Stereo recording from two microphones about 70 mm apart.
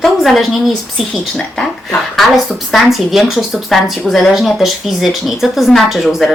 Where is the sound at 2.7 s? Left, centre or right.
Centre.